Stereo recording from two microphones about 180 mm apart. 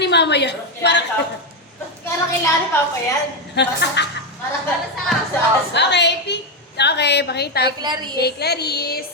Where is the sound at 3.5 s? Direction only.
70° left (ahead or behind).